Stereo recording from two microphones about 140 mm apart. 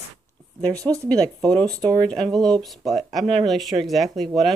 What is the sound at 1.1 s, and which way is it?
Speech, 10° left (ahead or behind).